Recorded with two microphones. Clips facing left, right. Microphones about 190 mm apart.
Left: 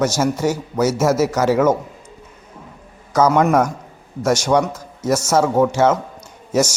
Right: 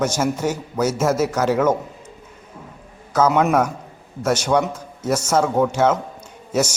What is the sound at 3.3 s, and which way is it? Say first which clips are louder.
Speech: left 2 dB; 5° right (ahead or behind).